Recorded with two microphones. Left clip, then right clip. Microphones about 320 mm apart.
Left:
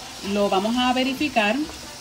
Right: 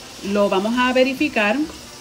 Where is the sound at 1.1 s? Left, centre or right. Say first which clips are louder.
Right 2 dB; centre.